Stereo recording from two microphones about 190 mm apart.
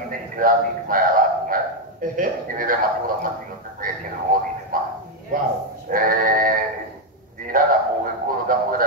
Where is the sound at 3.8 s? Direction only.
45° right (ahead or behind).